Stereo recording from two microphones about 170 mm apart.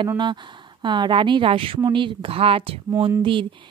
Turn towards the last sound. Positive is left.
turn(degrees=-30)  # may be behind; listen again after turning